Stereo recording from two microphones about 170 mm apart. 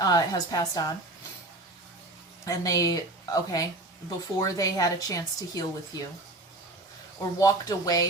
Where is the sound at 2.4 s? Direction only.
20° left (ahead or behind).